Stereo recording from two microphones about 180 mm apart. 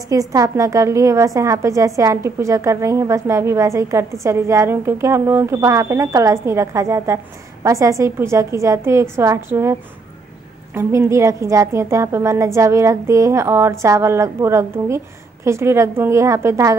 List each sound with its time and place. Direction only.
0.1 s a woman's voice: 20° right (ahead or behind)